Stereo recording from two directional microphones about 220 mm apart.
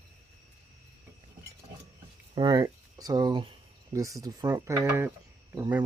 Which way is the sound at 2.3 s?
20° right (ahead or behind).